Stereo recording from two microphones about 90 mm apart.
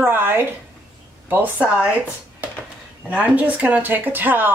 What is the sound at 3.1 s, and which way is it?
Speech, 15° right (ahead or behind).